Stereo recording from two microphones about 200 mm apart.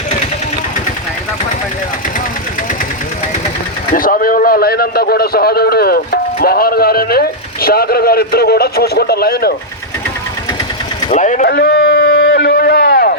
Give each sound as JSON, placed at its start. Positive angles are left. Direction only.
{"t": 3.9, "sound": "a man's voice", "side_deg": 45}
{"t": 11.1, "sound": "speech", "side_deg": 35}
{"t": 11.5, "sound": "a sound", "side_deg": 55}